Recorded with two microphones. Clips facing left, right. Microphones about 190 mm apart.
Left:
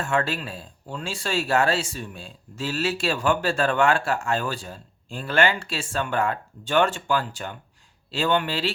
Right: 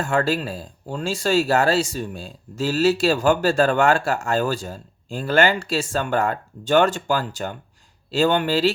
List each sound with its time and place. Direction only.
0.0 s speech: 40° right (ahead or behind)